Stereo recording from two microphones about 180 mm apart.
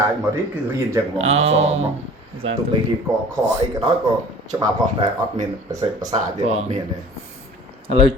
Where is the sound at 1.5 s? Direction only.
35° right (ahead or behind).